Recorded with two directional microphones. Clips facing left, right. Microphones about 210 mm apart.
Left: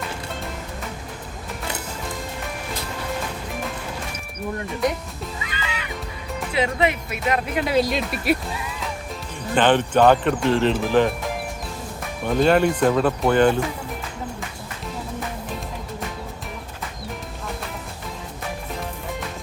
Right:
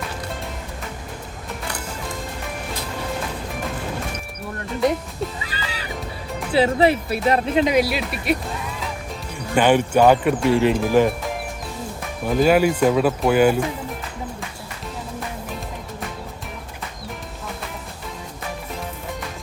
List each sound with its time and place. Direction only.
5.4 s music: 35° right (ahead or behind)
6.5 s speech: 35° right (ahead or behind); by 8.4 s centre (ahead or behind)
9.6 s speech: 10° right (ahead or behind)